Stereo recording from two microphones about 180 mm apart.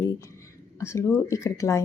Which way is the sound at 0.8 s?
15° left (ahead or behind).